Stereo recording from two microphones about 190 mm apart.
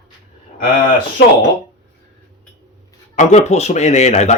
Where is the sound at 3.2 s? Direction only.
40° left (ahead or behind).